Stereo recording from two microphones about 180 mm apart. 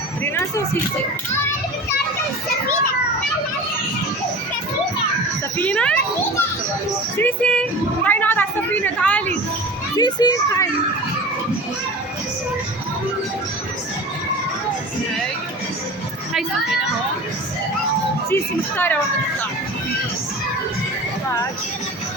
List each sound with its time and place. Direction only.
5.5 s a woman's voice: 5° left (ahead or behind)
7.2 s a woman's voice: 5° left (ahead or behind)
10.0 s a child's voice: 20° left (ahead or behind)
18.3 s a woman's voice: 15° left (ahead or behind)